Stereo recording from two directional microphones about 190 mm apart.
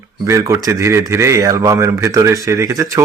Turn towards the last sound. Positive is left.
turn(degrees=-15)  # may be behind; listen again after turning